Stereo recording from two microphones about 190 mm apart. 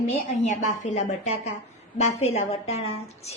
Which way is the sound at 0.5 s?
35° left (ahead or behind).